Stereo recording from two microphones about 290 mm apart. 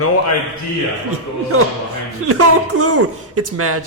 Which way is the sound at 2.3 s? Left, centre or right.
Right.